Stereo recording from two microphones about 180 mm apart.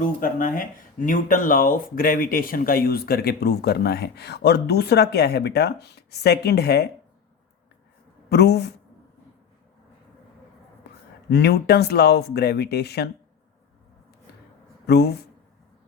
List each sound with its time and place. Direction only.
0.0 s speech: 45° left (ahead or behind); by 6.8 s 65° left (ahead or behind)
8.3 s speech: 65° left (ahead or behind)
10.8 s a sound: 65° left (ahead or behind)
11.3 s speech: 65° left (ahead or behind)